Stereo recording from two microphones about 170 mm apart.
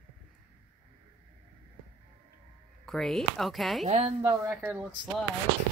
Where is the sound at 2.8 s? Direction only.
Centre (ahead or behind).